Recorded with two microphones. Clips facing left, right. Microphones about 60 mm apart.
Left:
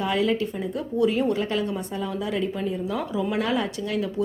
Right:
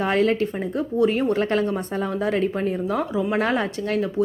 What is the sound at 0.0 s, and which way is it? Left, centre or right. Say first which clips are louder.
A woman's voice: right 3 dB; right.